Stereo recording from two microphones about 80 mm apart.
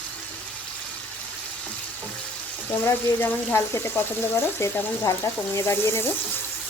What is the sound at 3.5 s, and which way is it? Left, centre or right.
Speech, left.